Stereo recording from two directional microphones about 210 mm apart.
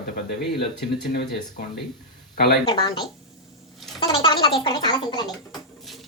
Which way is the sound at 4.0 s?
25° left (ahead or behind).